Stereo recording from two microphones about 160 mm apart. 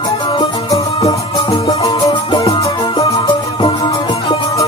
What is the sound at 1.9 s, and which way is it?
Music, 35° left (ahead or behind).